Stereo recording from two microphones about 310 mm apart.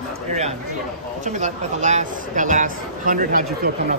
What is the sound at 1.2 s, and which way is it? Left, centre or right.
Speech, right.